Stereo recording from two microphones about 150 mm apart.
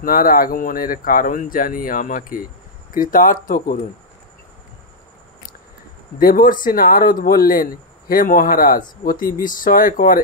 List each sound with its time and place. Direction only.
0.0 s speech: 75° left (ahead or behind)
6.1 s speech: 75° left (ahead or behind)